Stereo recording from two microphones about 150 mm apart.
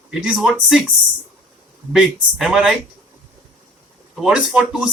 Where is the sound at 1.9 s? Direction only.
Centre (ahead or behind).